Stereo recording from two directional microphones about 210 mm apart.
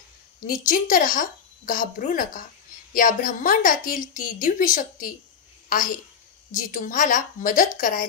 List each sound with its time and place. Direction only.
0.4 s a woman's voice: 40° left (ahead or behind)